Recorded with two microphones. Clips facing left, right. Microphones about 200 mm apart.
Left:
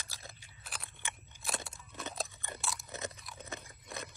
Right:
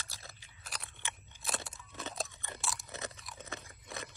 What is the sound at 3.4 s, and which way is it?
Crunch, 15° left (ahead or behind).